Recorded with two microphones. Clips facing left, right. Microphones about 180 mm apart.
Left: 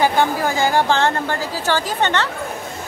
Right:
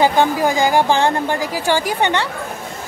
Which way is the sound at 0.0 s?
15° right (ahead or behind).